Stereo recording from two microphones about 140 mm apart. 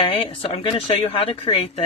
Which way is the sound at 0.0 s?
40° left (ahead or behind).